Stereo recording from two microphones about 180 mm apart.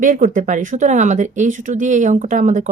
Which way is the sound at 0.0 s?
50° right (ahead or behind).